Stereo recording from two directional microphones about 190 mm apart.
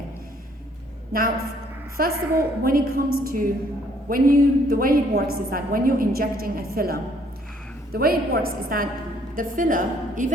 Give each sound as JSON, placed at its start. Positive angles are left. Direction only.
{"t": 1.1, "sound": "a woman's voice", "side_deg": -50}